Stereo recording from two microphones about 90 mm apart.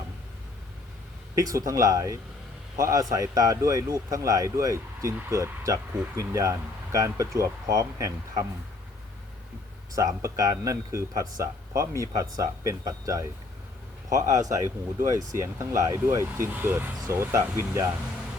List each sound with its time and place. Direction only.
1.4 s speech: 35° right (ahead or behind)
9.9 s speech: 35° right (ahead or behind)